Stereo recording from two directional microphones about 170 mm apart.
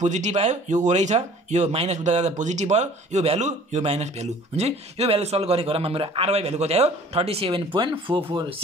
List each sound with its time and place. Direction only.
0.0 s speech: 45° right (ahead or behind)